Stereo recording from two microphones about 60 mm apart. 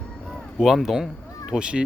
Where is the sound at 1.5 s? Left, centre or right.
Centre.